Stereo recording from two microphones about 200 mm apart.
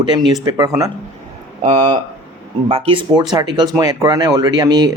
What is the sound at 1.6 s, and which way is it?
Speech, 35° right (ahead or behind).